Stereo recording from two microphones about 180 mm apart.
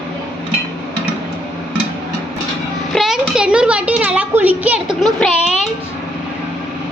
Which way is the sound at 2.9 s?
Centre (ahead or behind).